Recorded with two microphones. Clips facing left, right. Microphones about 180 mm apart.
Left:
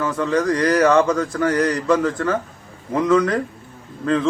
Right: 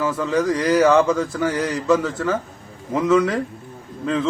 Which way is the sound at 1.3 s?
5° right (ahead or behind).